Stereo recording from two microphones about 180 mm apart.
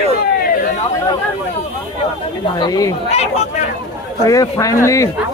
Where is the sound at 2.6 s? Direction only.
20° left (ahead or behind).